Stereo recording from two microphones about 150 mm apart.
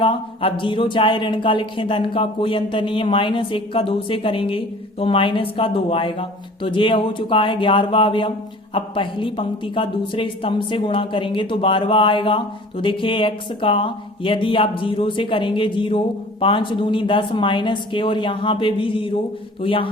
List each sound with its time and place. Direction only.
0.0 s speech: 35° left (ahead or behind)